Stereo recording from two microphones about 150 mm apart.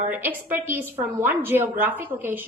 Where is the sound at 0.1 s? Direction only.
10° right (ahead or behind).